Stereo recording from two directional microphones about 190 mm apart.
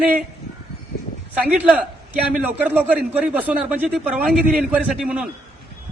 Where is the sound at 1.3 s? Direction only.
10° right (ahead or behind).